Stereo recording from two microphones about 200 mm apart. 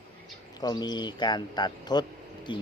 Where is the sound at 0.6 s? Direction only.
20° left (ahead or behind).